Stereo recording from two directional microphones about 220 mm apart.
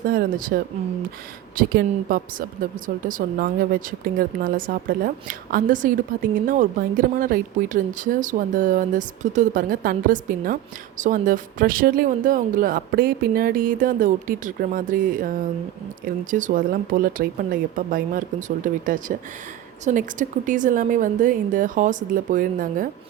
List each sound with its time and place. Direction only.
0.0 s speech: 40° right (ahead or behind)